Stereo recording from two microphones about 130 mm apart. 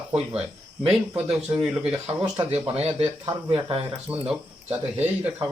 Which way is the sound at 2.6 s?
50° right (ahead or behind).